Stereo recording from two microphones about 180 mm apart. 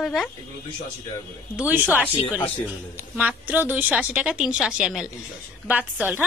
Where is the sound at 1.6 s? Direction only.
10° right (ahead or behind).